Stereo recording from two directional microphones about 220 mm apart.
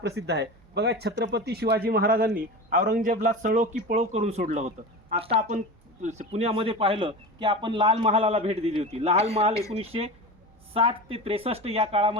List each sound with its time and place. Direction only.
0.0 s a man's voice: 50° right (ahead or behind); by 12.1 s 25° right (ahead or behind)